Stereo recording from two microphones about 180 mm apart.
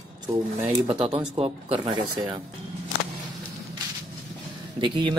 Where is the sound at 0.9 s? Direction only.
35° right (ahead or behind).